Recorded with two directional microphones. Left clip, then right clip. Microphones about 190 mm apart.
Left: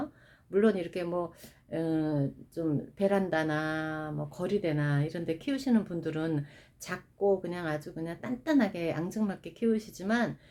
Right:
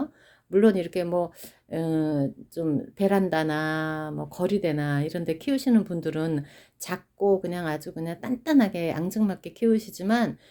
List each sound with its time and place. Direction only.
0.5 s speech: 40° right (ahead or behind)